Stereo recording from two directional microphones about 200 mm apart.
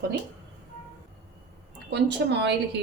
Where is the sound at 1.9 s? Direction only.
60° right (ahead or behind).